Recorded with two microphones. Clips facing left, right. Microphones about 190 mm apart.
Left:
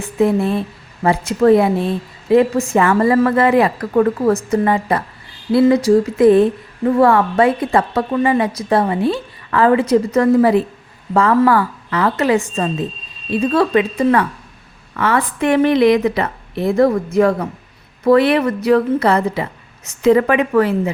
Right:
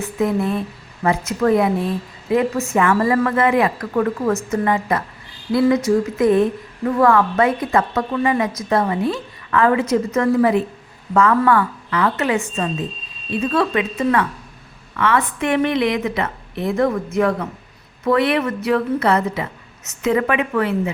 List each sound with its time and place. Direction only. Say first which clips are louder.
0.0 s speech: left 4 dB; 30° left (ahead or behind)
13.4 s speech: left 4 dB; 35° left (ahead or behind)